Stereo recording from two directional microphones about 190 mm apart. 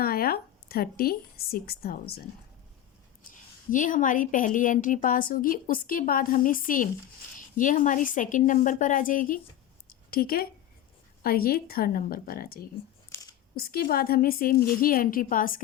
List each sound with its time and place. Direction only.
0.0 s speech: 50° left (ahead or behind)
3.2 s a woman's voice: 45° left (ahead or behind)
13.1 s a sound: 10° left (ahead or behind)
13.6 s a woman's voice: 50° left (ahead or behind)